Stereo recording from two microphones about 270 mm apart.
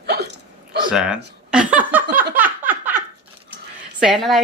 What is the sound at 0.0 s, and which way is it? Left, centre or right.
Hiccup, right.